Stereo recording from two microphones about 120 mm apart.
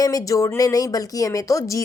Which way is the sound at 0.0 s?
30° left (ahead or behind).